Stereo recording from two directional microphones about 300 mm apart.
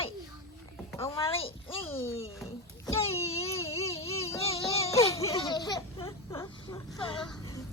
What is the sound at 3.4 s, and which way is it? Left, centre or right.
Baby cry, centre.